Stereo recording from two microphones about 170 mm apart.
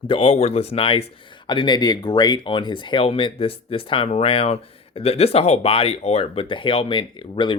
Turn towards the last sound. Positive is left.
turn(degrees=30)  # may be behind; listen again after turning